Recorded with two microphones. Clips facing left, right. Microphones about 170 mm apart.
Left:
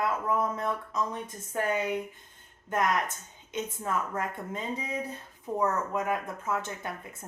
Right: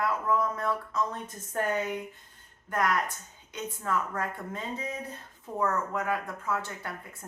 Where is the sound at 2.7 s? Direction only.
20° left (ahead or behind).